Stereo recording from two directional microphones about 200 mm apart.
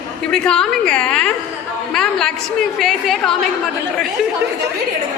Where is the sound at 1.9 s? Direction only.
Centre (ahead or behind).